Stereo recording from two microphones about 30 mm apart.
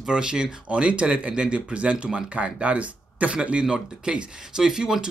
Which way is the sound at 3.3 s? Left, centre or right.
Right.